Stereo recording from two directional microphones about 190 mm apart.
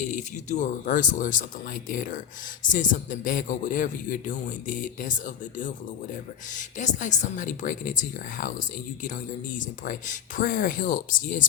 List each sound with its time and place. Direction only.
0.0 s speech: 40° left (ahead or behind)